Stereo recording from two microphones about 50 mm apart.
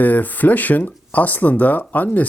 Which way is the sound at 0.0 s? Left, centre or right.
Left.